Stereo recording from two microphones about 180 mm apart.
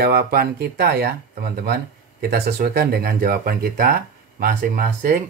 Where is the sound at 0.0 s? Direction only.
55° right (ahead or behind).